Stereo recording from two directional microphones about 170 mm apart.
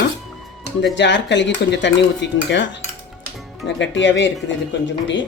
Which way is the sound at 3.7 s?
90° left.